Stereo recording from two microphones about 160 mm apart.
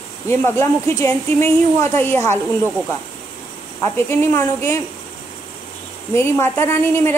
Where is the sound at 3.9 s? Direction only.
15° left (ahead or behind).